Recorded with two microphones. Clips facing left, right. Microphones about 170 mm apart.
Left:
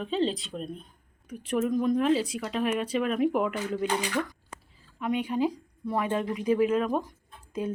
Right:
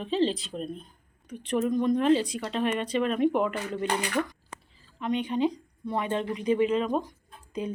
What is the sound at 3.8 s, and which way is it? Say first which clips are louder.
Speech: right 2 dB; 60° right (ahead or behind).